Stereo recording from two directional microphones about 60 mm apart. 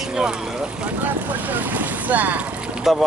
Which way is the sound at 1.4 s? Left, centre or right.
Right.